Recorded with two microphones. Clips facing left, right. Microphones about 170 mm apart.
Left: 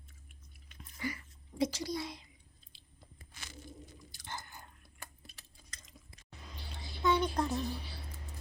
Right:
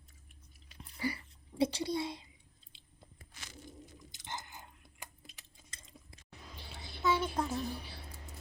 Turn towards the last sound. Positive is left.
turn(degrees=-5)  # may be behind; listen again after turning